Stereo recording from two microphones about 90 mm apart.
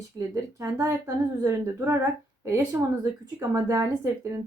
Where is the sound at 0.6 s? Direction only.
35° right (ahead or behind).